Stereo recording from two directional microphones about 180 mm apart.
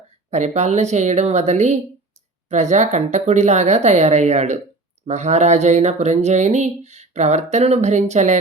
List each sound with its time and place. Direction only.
0.3 s speech: 40° right (ahead or behind)